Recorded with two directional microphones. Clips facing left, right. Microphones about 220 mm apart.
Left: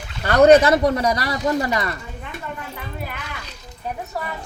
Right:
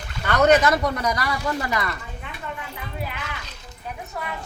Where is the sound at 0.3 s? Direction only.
30° left (ahead or behind).